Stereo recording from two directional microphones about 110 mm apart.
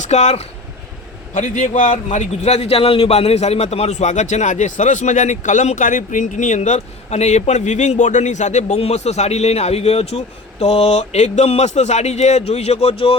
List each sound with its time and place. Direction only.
0.0 s a man's voice: 90° left; by 13.1 s 60° left (ahead or behind)